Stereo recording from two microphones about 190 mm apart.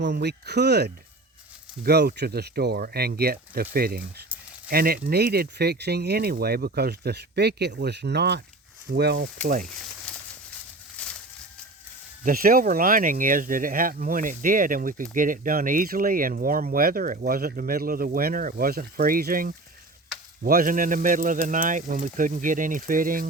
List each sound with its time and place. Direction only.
0.0 s speech: 60° right (ahead or behind); by 9.6 s 45° right (ahead or behind)
10.1 s a sound: 5° left (ahead or behind)
12.2 s speech: 50° right (ahead or behind)